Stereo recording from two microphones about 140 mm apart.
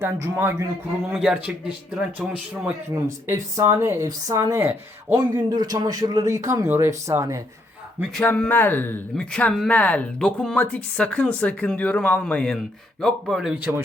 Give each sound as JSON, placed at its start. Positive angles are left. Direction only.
{"t": 0.0, "sound": "a man's voice", "side_deg": -15}
{"t": 1.2, "sound": "a man's voice", "side_deg": -5}
{"t": 2.9, "sound": "speech", "side_deg": -20}
{"t": 8.1, "sound": "speech", "side_deg": 10}